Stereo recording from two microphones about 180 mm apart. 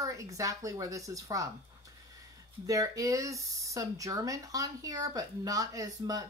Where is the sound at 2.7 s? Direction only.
20° right (ahead or behind).